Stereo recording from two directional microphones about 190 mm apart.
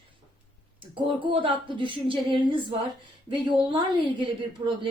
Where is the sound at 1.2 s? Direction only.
25° right (ahead or behind).